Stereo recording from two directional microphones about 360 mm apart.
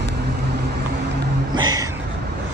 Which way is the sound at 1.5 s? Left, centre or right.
Centre.